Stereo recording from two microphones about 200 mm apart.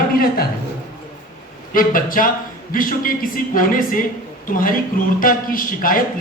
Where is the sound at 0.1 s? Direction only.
45° left (ahead or behind).